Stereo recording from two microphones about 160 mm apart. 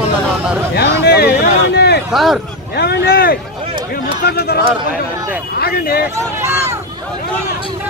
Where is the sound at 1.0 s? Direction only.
90° left.